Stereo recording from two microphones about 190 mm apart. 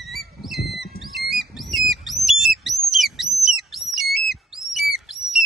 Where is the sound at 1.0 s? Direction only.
Centre (ahead or behind).